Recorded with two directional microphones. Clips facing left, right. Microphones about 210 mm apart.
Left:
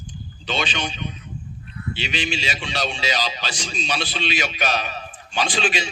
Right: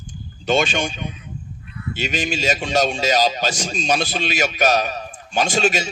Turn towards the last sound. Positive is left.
turn(degrees=-45)  # may be behind; listen again after turning